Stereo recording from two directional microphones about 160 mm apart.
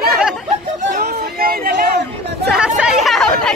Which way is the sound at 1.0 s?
80° right.